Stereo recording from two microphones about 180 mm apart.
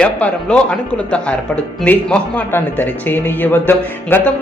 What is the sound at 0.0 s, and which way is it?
Speech, 5° left (ahead or behind).